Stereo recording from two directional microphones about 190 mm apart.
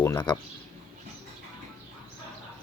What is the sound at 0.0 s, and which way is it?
Speech, 20° left (ahead or behind).